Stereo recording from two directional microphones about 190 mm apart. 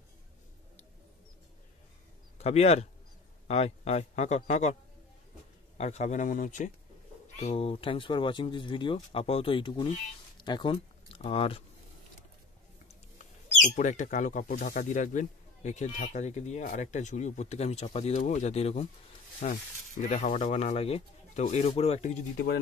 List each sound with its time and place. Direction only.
2.3 s speech: 35° left (ahead or behind)
5.8 s speech: 35° left (ahead or behind)
13.2 s speech: 40° left (ahead or behind)